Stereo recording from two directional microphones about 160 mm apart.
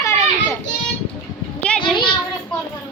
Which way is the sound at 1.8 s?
30° left (ahead or behind).